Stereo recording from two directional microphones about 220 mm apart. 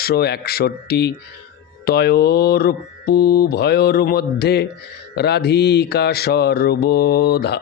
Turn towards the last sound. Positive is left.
turn(degrees=45)  # may be behind; listen again after turning